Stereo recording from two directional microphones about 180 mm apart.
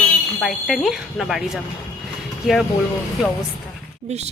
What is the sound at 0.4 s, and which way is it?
Speech, centre (ahead or behind).